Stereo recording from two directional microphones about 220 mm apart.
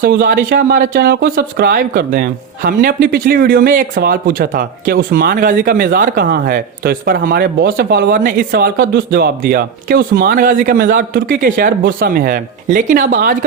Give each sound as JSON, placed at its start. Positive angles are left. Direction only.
{"t": 0.0, "sound": "speech", "side_deg": -40}